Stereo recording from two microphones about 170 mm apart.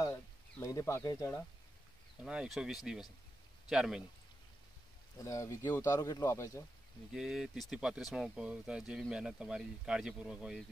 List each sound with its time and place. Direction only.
0.0 s a sound: 20° left (ahead or behind)
2.2 s speech: 5° right (ahead or behind)
5.2 s speech: 20° left (ahead or behind)
7.1 s speech: centre (ahead or behind)